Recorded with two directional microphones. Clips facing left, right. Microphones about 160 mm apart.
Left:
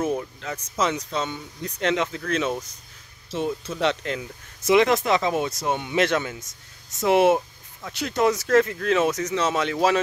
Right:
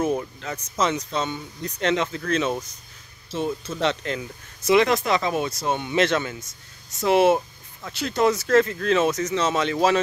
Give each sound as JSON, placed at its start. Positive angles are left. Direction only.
{"t": 0.0, "sound": "a sound", "side_deg": -5}
{"t": 0.5, "sound": "speech", "side_deg": 10}
{"t": 4.6, "sound": "speech", "side_deg": 20}